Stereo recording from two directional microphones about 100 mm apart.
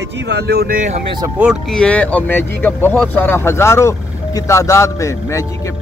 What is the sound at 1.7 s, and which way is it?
Speech, 10° left (ahead or behind).